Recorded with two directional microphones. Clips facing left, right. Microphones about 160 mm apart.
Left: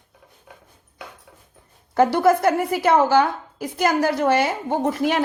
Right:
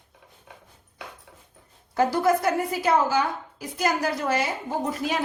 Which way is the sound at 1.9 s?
70° left (ahead or behind).